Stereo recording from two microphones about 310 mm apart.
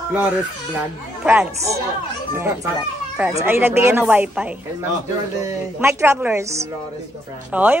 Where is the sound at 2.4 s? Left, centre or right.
Centre.